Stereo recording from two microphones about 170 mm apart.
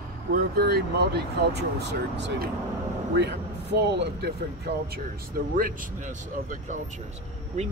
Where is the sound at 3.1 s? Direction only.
90° right.